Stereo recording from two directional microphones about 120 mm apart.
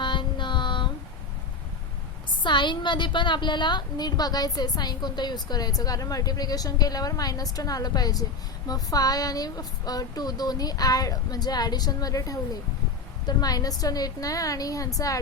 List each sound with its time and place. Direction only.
0.0 s child singing: 40° left (ahead or behind)
2.3 s a woman's voice: 40° left (ahead or behind)